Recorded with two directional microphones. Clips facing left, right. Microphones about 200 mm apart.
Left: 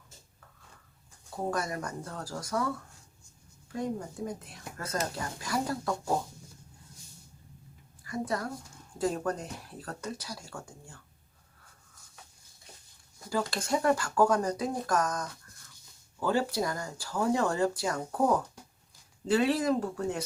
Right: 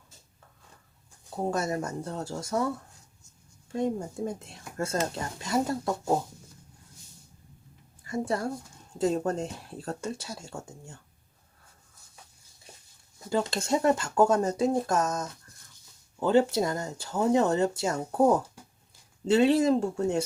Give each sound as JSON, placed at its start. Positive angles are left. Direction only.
{"t": 1.5, "sound": "speech", "side_deg": -25}
{"t": 3.7, "sound": "speech", "side_deg": -25}
{"t": 8.0, "sound": "a woman's voice", "side_deg": -25}
{"t": 13.1, "sound": "speech", "side_deg": -25}